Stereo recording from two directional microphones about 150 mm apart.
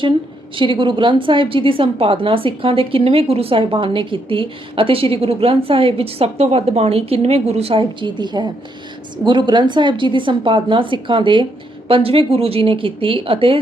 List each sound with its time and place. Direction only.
0.5 s a woman's voice: 35° right (ahead or behind)